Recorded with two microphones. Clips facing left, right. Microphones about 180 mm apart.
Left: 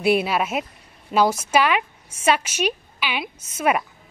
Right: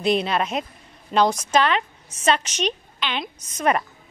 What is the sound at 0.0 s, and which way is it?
A woman's voice, 10° left (ahead or behind).